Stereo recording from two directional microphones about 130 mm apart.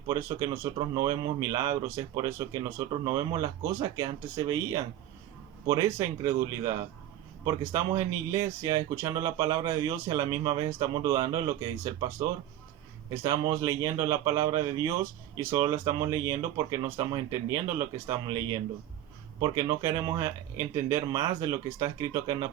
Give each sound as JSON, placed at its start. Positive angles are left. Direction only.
{"t": 0.1, "sound": "speech", "side_deg": -25}
{"t": 13.5, "sound": "speech", "side_deg": -25}